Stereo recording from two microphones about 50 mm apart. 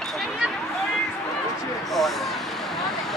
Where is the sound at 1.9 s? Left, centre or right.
Centre.